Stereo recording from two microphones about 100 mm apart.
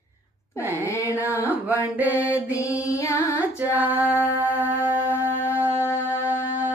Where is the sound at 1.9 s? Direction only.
15° right (ahead or behind).